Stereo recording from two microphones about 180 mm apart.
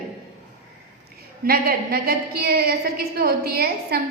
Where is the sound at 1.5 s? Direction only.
60° right (ahead or behind).